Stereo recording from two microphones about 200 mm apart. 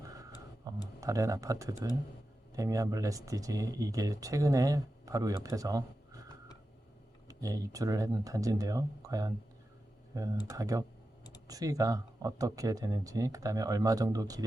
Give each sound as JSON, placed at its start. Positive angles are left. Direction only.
{"t": 0.0, "sound": "tick", "side_deg": -15}
{"t": 1.0, "sound": "speech", "side_deg": -15}
{"t": 10.5, "sound": "speech", "side_deg": -15}